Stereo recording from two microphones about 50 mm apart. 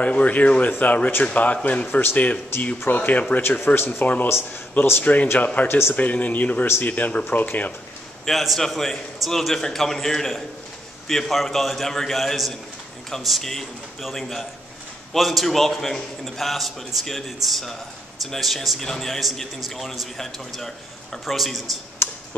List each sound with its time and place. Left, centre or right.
0.0 s speech: left
1.9 s speech: left
2.9 s speech: left
3.4 s speech: left
4.0 s speech: left
5.7 s speech: left
5.9 s speech: left
8.3 s a man's voice: centre
22.0 s a sound: left